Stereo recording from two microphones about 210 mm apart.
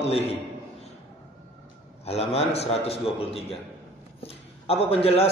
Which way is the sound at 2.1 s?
30° left (ahead or behind).